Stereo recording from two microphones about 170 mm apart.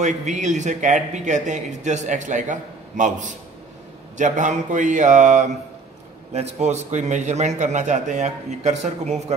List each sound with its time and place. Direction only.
0.0 s speech: 45° right (ahead or behind)